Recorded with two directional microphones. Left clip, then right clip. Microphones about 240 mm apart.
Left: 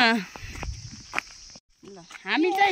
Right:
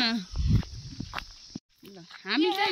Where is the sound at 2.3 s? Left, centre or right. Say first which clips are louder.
Left 3 dB; centre.